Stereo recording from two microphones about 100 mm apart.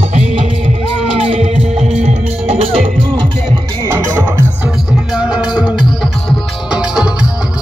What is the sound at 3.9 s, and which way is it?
Music, 20° right (ahead or behind).